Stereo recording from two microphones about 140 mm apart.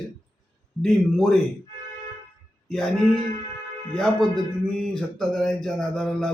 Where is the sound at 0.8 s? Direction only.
5° left (ahead or behind).